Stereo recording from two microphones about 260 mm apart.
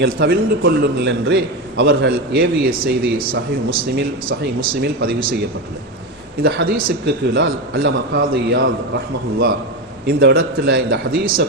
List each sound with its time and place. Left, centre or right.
0.0 s a man's voice: right
6.4 s a man's voice: right
10.1 s a man's voice: right